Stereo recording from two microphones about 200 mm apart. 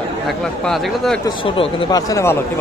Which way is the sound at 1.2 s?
25° left (ahead or behind).